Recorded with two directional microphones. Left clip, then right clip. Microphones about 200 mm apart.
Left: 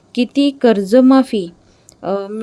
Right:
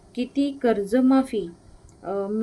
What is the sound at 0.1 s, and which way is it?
Speech, 50° left (ahead or behind).